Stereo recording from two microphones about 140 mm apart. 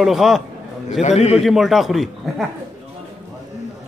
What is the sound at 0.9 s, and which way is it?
Speech, 50° left (ahead or behind).